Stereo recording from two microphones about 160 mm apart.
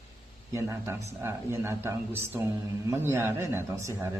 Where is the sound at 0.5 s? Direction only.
15° right (ahead or behind).